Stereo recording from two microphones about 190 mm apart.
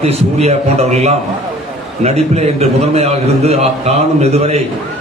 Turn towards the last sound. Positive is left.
turn(degrees=-35)  # may be behind; listen again after turning